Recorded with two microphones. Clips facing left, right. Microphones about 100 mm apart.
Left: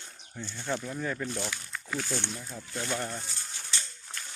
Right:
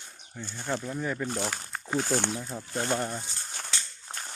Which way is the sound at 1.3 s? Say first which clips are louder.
Right 3 dB; 50° right (ahead or behind).